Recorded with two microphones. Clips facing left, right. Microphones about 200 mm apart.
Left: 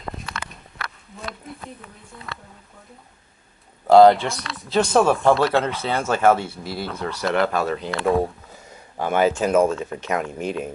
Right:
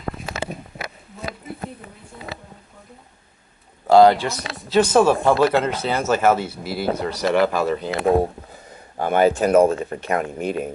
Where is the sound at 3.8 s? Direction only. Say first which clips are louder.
Left 1 dB; centre (ahead or behind).